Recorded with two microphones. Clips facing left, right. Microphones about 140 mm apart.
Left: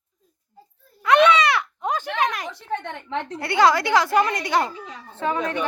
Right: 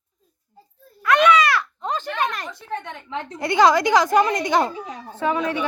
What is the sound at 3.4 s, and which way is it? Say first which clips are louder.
A woman's voice: right 2 dB; 20° right (ahead or behind).